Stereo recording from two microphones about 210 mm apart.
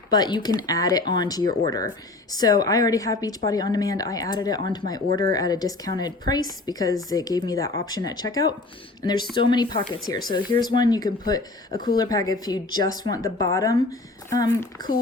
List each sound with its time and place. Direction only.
0.1 s a woman's voice: 20° left (ahead or behind)